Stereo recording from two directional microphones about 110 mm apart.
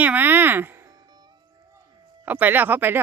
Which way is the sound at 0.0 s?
15° right (ahead or behind).